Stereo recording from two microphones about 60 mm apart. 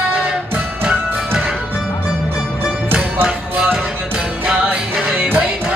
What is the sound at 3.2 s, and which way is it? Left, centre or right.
Music, centre.